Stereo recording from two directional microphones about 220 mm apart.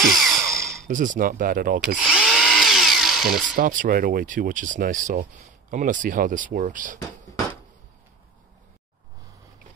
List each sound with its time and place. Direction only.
0.0 s a sound: centre (ahead or behind)
0.8 s speech: 35° right (ahead or behind)
2.0 s drill: centre (ahead or behind)
3.5 s speech: 35° right (ahead or behind)